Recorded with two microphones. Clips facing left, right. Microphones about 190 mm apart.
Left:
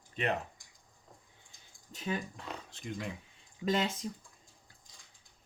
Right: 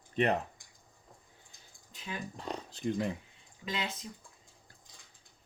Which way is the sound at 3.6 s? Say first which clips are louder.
Left 7 dB; 50° left (ahead or behind).